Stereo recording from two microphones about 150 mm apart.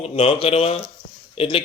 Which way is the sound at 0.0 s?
35° left (ahead or behind).